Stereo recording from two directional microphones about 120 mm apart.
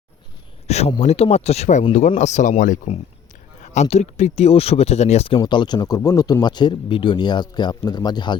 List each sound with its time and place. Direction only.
0.7 s speech: 60° left (ahead or behind)
1.9 s speech: 80° left; by 5.4 s 55° left (ahead or behind)
5.4 s speech: 40° left (ahead or behind)